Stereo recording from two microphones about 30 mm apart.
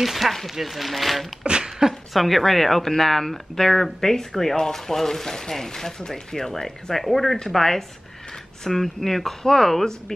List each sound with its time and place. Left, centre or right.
0.0 s speech: centre
1.4 s a sound: right
2.1 s speech: centre
7.3 s speech: centre